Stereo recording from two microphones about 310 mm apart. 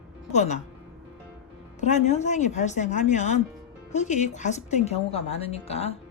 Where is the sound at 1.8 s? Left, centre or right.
Left.